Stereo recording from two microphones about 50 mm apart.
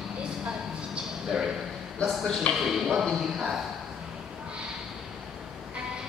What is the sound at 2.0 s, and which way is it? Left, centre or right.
Speech, centre.